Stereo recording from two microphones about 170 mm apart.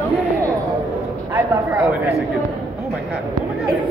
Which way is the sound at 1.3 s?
15° right (ahead or behind).